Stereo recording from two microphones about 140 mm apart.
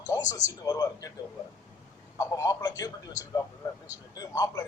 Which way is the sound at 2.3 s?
25° left (ahead or behind).